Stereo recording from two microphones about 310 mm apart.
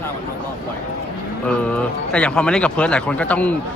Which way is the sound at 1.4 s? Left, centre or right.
Centre.